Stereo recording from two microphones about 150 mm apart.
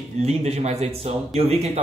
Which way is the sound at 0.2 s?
45° right (ahead or behind).